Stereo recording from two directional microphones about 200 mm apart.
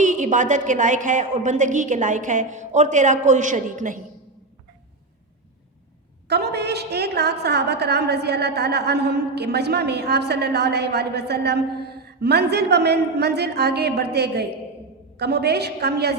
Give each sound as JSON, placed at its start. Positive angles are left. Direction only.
{"t": 0.0, "sound": "a woman's voice", "side_deg": -40}
{"t": 6.2, "sound": "a woman's voice", "side_deg": -55}